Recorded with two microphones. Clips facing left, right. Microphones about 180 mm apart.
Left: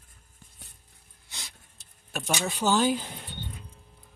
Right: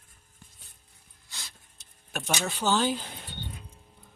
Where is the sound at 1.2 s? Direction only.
20° left (ahead or behind).